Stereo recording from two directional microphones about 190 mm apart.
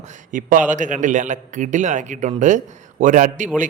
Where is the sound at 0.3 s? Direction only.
45° right (ahead or behind).